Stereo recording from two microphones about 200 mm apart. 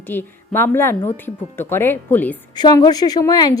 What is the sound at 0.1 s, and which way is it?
A woman's voice, 10° left (ahead or behind).